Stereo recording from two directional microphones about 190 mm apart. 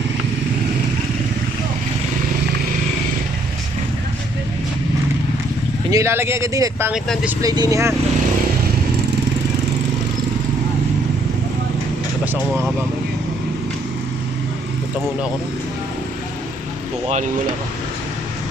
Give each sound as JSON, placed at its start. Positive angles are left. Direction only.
{"t": 5.9, "sound": "speech", "side_deg": -15}
{"t": 7.4, "sound": "speech", "side_deg": -20}
{"t": 12.2, "sound": "speech", "side_deg": -10}